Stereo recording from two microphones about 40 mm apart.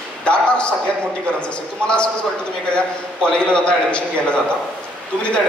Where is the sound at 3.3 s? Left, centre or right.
Left.